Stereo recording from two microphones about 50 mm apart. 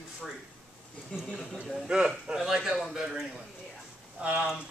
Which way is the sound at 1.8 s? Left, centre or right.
Centre.